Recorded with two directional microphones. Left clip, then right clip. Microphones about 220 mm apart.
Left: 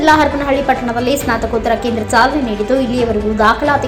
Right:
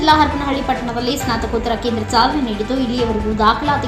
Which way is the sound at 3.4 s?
15° left (ahead or behind).